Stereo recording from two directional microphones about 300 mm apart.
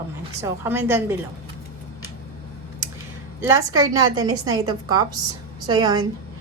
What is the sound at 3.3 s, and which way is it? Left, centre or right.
A woman's voice, centre.